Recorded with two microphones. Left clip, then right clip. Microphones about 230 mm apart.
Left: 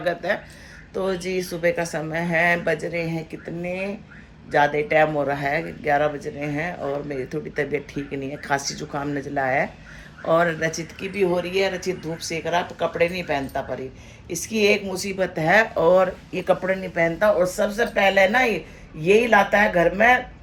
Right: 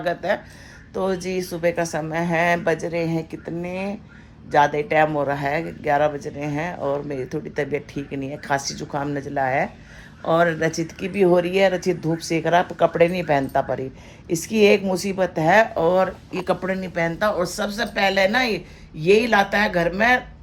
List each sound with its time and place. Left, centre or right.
0.0 s speech: centre; by 15.1 s right
15.2 s speech: centre